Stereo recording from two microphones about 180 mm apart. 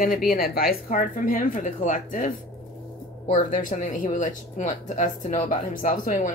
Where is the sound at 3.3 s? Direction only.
45° left (ahead or behind).